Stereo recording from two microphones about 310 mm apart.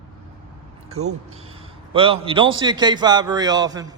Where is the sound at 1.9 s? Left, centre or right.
Centre.